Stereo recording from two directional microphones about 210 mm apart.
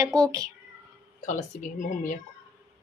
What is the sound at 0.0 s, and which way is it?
Speech, 15° right (ahead or behind).